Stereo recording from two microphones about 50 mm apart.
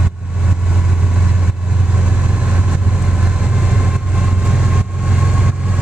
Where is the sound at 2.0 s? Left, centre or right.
Right.